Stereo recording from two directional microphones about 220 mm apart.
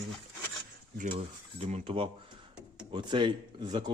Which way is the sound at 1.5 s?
25° right (ahead or behind).